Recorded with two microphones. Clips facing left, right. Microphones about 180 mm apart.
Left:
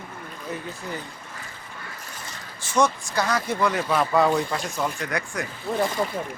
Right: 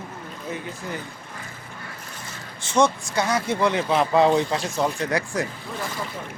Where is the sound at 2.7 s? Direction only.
25° right (ahead or behind).